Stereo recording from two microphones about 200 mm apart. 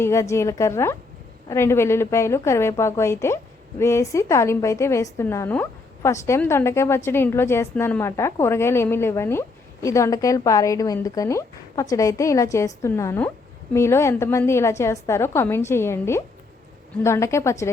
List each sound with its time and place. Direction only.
0.0 s a woman's voice: 15° left (ahead or behind)